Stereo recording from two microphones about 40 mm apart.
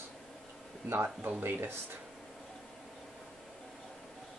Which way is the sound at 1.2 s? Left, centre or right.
Right.